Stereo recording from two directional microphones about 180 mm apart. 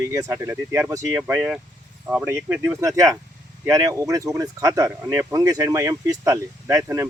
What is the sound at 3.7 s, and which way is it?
Speech, 15° right (ahead or behind).